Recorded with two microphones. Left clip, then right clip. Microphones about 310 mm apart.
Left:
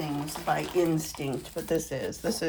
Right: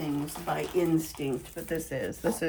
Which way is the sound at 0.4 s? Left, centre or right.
Left.